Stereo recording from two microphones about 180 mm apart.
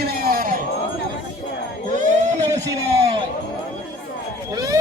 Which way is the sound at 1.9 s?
45° right (ahead or behind).